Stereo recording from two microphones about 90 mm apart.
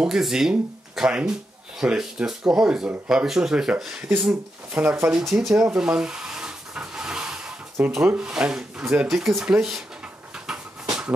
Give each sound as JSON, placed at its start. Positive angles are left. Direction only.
{"t": 0.0, "sound": "speech", "side_deg": -5}
{"t": 5.2, "sound": "rub", "side_deg": -5}
{"t": 7.8, "sound": "speech", "side_deg": -15}
{"t": 10.4, "sound": "a sound", "side_deg": -10}